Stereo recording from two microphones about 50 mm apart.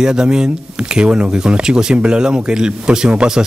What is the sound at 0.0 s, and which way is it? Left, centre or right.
Speech, centre.